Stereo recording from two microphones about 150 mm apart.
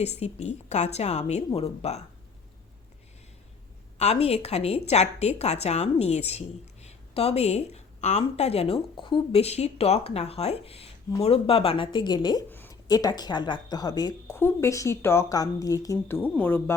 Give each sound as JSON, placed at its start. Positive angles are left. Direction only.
{"t": 0.0, "sound": "a woman's voice", "side_deg": 45}
{"t": 3.9, "sound": "a woman's voice", "side_deg": 45}